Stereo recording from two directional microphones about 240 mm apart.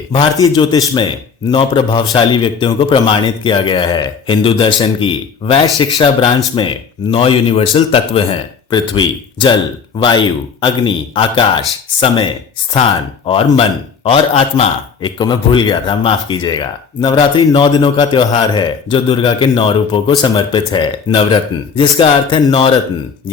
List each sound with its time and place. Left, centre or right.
0.1 s a man's voice: centre